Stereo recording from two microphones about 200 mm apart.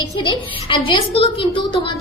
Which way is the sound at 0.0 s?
25° left (ahead or behind).